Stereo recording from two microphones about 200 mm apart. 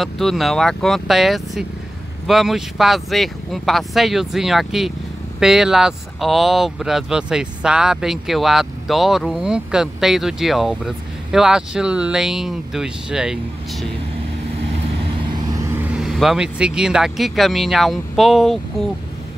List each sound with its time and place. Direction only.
0.0 s speech: centre (ahead or behind)
15.8 s speech: 5° right (ahead or behind)